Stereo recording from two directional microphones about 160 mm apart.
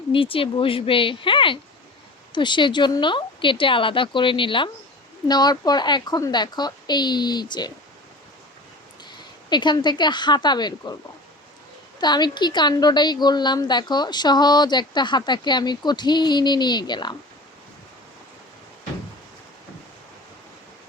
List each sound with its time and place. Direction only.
0.1 s a woman's voice: 35° left (ahead or behind)
9.5 s a woman's voice: 30° left (ahead or behind)
11.9 s a woman's voice: 25° left (ahead or behind)